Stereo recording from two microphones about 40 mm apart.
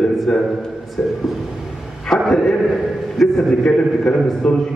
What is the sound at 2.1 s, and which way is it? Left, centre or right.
A man's voice, centre.